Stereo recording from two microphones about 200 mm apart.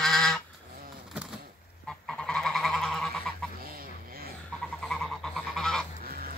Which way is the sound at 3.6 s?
45° right (ahead or behind).